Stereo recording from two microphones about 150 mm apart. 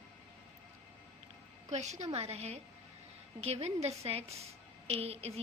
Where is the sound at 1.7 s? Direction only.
50° right (ahead or behind).